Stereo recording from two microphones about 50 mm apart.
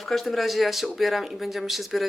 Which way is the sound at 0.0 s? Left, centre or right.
Centre.